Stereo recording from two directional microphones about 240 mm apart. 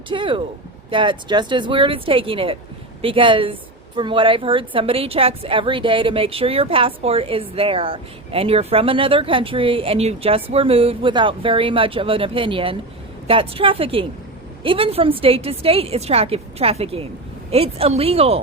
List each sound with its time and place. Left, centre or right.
0.1 s a woman's voice: right